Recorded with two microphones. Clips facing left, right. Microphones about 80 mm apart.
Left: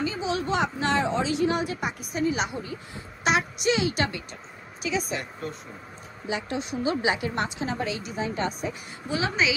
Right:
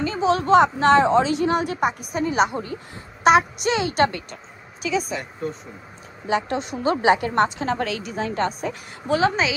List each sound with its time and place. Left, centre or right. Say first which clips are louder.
0.2 s a woman's voice: right 13 dB; right
6.2 s a woman's voice: right 7 dB; right
7.6 s a woman's voice: right 5 dB; right
8.0 s a woman's voice: right 4 dB; right